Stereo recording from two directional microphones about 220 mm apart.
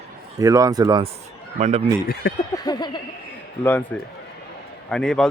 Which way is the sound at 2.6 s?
20° left (ahead or behind).